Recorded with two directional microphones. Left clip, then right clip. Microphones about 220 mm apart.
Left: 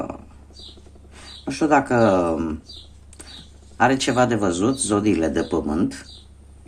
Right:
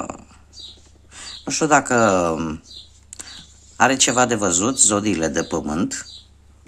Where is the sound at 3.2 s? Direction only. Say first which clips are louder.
Right 4 dB; 30° right (ahead or behind).